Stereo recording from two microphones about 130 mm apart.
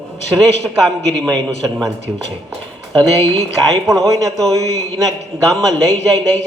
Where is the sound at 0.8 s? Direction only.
5° left (ahead or behind).